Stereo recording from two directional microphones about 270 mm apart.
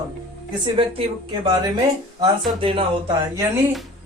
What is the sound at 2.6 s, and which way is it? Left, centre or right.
Speech, centre.